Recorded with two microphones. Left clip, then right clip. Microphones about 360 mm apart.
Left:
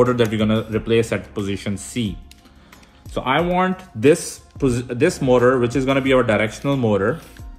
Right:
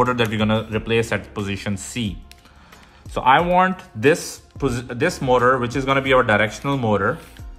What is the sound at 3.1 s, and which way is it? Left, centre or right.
Speech, right.